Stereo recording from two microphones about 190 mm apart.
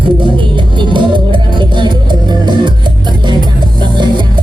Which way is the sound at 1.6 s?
25° right (ahead or behind).